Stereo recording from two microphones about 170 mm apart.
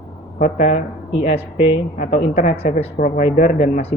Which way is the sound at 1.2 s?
40° left (ahead or behind).